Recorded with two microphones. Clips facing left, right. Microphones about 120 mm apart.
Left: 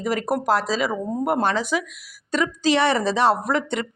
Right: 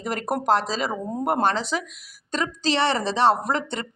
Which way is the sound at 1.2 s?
45° right (ahead or behind).